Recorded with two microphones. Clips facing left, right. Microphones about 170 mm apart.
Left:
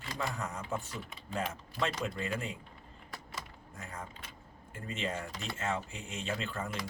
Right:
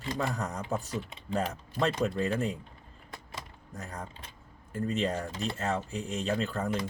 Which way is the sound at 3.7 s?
40° right (ahead or behind).